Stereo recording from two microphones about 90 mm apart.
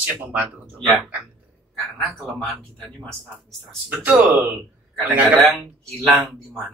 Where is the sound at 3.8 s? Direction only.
15° right (ahead or behind).